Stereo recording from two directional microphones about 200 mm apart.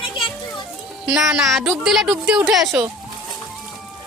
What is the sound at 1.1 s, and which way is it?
Speech, 5° right (ahead or behind).